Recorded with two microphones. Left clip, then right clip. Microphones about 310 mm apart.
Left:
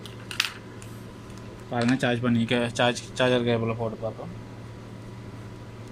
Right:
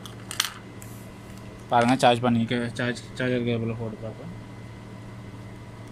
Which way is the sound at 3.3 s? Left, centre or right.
Left.